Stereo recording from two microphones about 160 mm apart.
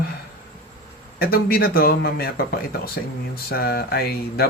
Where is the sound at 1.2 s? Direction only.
70° left (ahead or behind).